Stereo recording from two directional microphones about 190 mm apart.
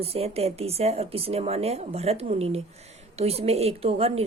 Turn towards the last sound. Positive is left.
turn(degrees=-30)  # may be behind; listen again after turning